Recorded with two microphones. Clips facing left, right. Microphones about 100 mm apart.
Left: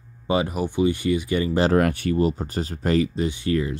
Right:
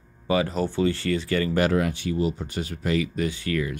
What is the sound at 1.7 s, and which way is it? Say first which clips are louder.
Speech: left 4 dB; 50° left (ahead or behind).